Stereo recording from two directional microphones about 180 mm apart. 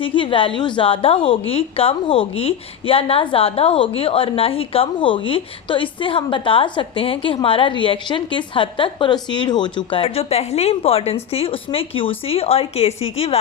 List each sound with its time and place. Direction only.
0.0 s a woman's voice: 30° left (ahead or behind)